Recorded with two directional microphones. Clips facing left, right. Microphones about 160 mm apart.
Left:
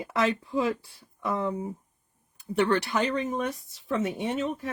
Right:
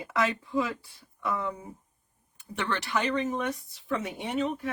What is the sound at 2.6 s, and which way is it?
Speech, 35° left (ahead or behind).